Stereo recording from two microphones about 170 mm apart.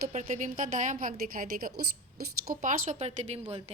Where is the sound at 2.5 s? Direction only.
50° right (ahead or behind).